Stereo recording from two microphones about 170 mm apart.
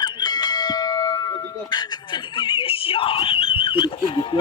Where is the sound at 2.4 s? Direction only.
30° left (ahead or behind).